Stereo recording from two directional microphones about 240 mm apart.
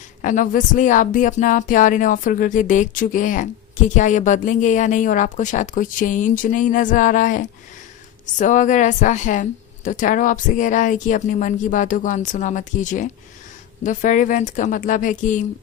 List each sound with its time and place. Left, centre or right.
0.2 s speech: left